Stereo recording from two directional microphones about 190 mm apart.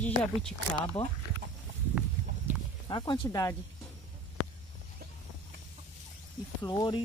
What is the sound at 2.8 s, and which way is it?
Speech, 25° left (ahead or behind).